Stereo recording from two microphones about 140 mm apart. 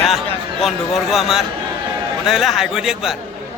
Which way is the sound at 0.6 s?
Centre (ahead or behind).